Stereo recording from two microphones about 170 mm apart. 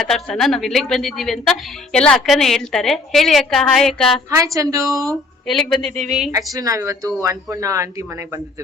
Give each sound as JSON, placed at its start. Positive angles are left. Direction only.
{"t": 0.1, "sound": "a woman's voice", "side_deg": 0}
{"t": 4.3, "sound": "a woman's voice", "side_deg": -20}
{"t": 5.5, "sound": "a woman's voice", "side_deg": 0}
{"t": 6.3, "sound": "a woman's voice", "side_deg": -20}